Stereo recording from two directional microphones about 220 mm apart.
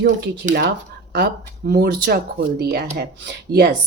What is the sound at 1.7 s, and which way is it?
Speech, 45° right (ahead or behind).